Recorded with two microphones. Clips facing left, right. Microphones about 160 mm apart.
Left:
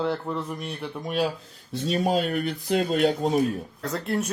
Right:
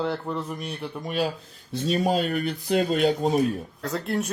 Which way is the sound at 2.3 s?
Centre (ahead or behind).